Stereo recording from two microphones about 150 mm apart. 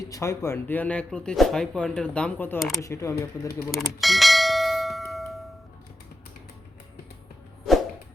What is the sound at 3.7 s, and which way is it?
Bell, centre (ahead or behind).